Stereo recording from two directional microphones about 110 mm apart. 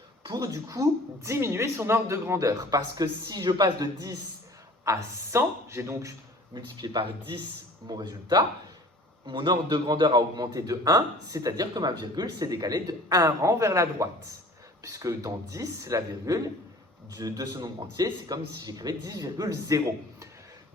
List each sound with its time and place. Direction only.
0.2 s a man's voice: 40° right (ahead or behind)
6.5 s a man's voice: 40° right (ahead or behind)